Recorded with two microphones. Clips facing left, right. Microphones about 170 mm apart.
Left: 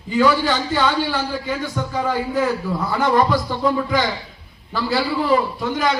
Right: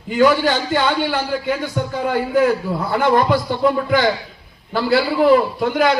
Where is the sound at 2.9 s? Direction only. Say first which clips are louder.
Right 2 dB; 65° right (ahead or behind).